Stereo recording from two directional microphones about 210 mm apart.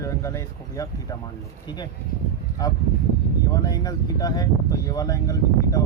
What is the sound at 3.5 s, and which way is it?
A man's voice, 15° left (ahead or behind).